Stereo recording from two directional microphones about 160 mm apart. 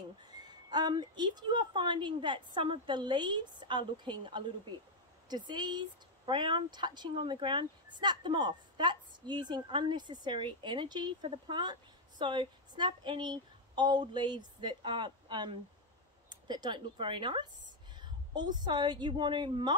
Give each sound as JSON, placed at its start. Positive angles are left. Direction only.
{"t": 0.3, "sound": "a woman's voice", "side_deg": -25}